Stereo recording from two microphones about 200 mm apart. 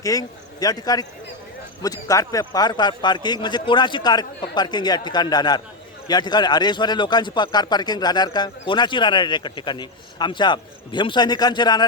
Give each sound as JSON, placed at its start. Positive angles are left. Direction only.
{"t": 0.0, "sound": "a man's voice", "side_deg": 20}